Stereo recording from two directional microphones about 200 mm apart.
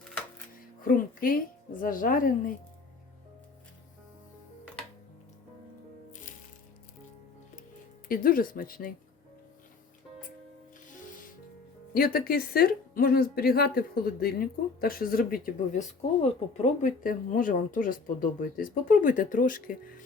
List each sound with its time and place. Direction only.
0.8 s speech: 45° left (ahead or behind)
8.0 s speech: 45° left (ahead or behind)
11.9 s speech: 45° left (ahead or behind)
16.0 s speech: 30° left (ahead or behind)